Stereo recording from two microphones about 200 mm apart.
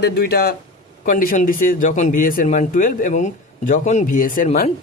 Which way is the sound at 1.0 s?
40° left (ahead or behind).